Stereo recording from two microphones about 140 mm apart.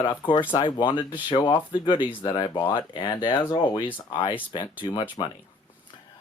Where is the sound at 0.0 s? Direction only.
35° left (ahead or behind).